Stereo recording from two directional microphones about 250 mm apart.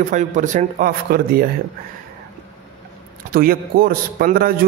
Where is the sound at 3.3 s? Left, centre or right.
Right.